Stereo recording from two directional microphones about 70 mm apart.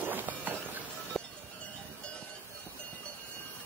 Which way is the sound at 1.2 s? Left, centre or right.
Centre.